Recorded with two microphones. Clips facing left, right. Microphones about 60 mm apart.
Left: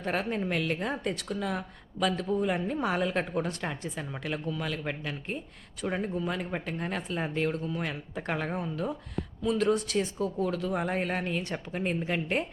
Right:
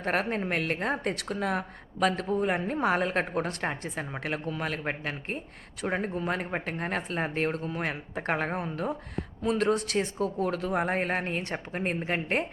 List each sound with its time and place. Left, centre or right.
0.0 s speech: right